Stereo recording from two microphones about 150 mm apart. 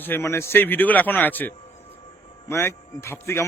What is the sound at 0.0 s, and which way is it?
Speech, 15° left (ahead or behind).